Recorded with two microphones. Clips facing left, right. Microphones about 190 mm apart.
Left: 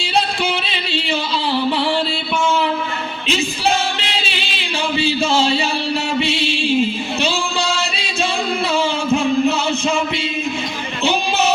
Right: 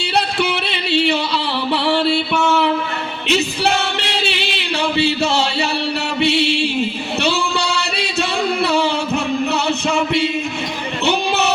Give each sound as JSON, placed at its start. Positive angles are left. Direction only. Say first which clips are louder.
{"t": 0.0, "sound": "music", "louder": "right 1 dB", "side_deg": -65}
{"t": 6.1, "sound": "mantra", "louder": "right 3 dB", "side_deg": -65}
{"t": 7.2, "sound": "singing", "louder": "right 3 dB", "side_deg": -65}
{"t": 8.6, "sound": "music", "louder": "even", "side_deg": -65}